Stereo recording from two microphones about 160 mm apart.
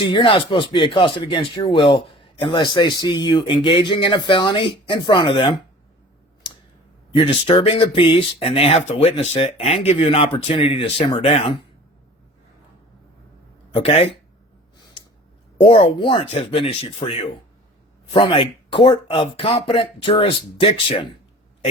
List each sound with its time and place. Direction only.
0.0 s speech: 30° left (ahead or behind)
7.2 s speech: 35° left (ahead or behind)
13.7 s speech: 35° left (ahead or behind)
15.6 s speech: 35° left (ahead or behind)